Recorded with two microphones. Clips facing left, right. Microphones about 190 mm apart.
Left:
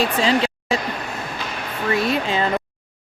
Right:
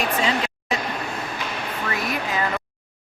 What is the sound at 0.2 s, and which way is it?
Speech, 30° left (ahead or behind).